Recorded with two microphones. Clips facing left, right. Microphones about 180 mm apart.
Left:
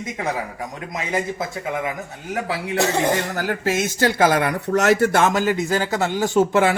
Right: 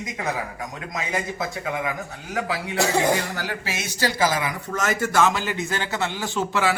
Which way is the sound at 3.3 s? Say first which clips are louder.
Left 8 dB; 50° left (ahead or behind).